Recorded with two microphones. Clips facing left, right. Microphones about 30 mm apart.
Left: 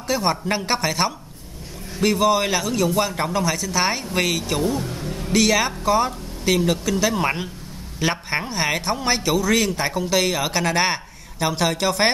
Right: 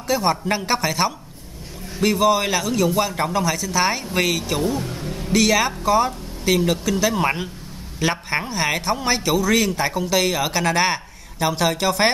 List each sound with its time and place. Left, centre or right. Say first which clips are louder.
0.0 s a man's voice: right 2 dB; centre